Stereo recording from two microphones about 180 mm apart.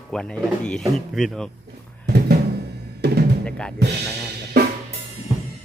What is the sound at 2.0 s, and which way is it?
Music, 65° right (ahead or behind).